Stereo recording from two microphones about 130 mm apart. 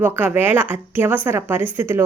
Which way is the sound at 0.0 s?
15° right (ahead or behind).